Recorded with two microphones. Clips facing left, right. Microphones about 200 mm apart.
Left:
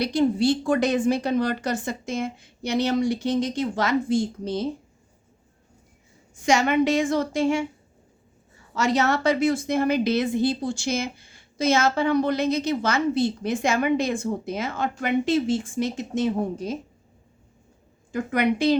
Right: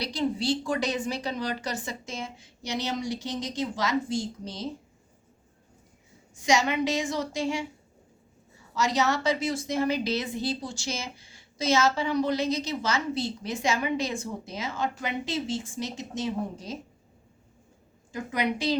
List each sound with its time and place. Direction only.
0.0 s a woman's voice: 55° left (ahead or behind)
6.4 s a woman's voice: 55° left (ahead or behind)
8.7 s a woman's voice: 55° left (ahead or behind)
18.1 s a woman's voice: 55° left (ahead or behind)